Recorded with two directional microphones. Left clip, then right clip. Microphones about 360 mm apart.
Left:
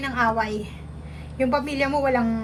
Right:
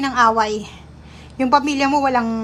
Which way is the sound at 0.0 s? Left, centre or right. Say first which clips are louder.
Right 7 dB; centre.